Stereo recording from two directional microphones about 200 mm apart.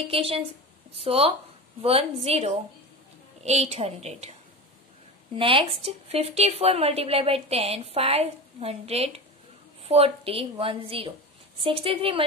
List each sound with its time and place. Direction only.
0.1 s a woman's voice: 30° right (ahead or behind)